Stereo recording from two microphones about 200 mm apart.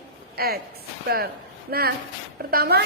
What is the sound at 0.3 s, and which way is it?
A woman's voice, 50° right (ahead or behind).